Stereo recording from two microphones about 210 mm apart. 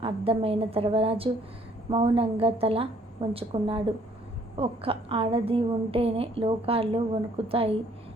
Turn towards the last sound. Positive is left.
turn(degrees=-25)  # may be behind; listen again after turning